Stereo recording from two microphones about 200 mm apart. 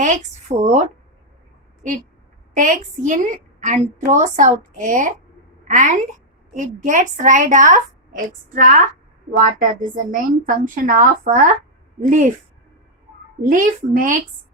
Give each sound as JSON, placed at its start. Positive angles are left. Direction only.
{"t": 0.0, "sound": "a woman's voice", "side_deg": -35}
{"t": 2.6, "sound": "a woman's voice", "side_deg": -40}
{"t": 13.4, "sound": "a woman's voice", "side_deg": -45}